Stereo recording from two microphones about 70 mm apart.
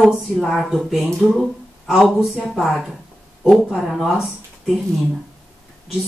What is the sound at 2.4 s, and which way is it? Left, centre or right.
Speech, centre.